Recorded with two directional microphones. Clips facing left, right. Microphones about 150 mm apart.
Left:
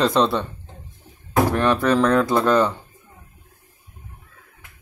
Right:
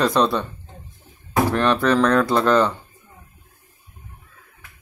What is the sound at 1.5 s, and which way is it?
Speech, 15° left (ahead or behind).